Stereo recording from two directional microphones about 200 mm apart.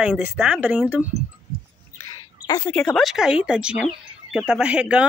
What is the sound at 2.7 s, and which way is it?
Speech, 5° left (ahead or behind).